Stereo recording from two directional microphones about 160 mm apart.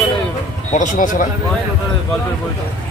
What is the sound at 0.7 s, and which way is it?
Speech, 55° left (ahead or behind).